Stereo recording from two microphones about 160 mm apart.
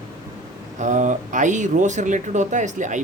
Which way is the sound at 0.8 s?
50° right (ahead or behind).